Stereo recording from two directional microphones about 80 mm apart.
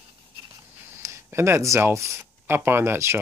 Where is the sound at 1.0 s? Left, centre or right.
Right.